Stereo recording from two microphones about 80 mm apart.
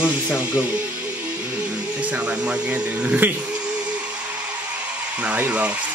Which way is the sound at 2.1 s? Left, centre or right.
Centre.